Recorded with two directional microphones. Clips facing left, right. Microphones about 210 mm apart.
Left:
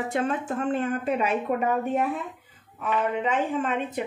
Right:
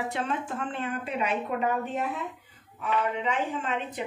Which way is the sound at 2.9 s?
50° left (ahead or behind).